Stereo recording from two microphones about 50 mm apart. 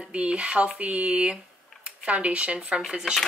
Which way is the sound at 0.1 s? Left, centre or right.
Right.